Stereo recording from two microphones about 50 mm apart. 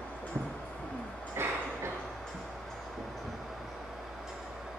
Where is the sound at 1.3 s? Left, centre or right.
Right.